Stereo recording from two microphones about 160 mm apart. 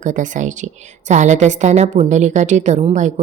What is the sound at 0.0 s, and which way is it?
A woman's voice, 50° right (ahead or behind).